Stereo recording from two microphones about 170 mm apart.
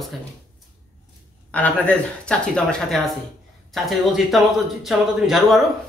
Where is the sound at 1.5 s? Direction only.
10° left (ahead or behind).